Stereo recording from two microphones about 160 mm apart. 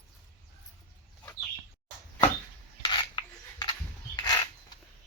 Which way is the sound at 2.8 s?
30° left (ahead or behind).